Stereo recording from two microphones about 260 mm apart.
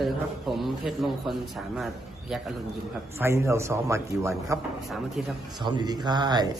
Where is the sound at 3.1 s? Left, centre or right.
Centre.